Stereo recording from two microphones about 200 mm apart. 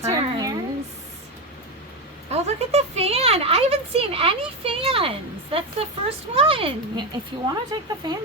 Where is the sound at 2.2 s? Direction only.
30° right (ahead or behind).